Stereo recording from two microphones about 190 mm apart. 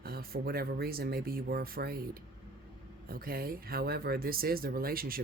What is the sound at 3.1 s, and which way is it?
Speech, 50° right (ahead or behind).